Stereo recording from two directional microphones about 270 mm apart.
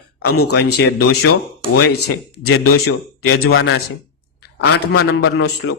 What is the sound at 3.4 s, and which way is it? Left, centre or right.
Speech, left.